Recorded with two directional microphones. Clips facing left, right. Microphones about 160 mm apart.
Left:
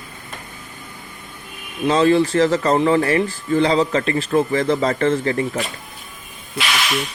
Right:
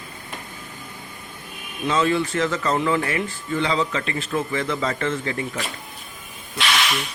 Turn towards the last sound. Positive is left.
turn(degrees=0)  # may be behind; listen again after turning